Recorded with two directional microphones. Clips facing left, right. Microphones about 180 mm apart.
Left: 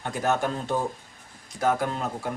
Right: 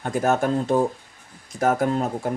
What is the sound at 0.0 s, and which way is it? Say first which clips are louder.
Speech: right 4 dB; 45° right (ahead or behind).